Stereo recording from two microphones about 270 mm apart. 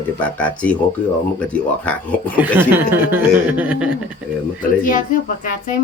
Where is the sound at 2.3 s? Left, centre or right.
Centre.